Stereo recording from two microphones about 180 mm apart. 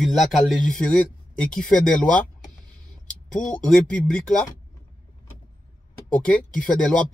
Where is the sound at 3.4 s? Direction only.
45° left (ahead or behind).